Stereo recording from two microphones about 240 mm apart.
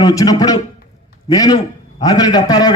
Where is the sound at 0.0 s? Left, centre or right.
Centre.